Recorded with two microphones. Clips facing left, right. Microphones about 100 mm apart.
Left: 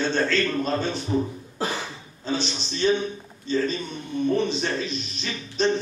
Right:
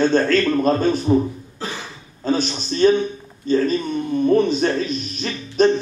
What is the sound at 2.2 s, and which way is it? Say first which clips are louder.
A man's voice: right 7 dB; 45° right (ahead or behind).